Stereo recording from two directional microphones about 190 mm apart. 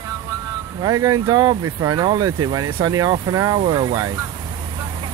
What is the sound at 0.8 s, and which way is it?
Speech, 20° right (ahead or behind).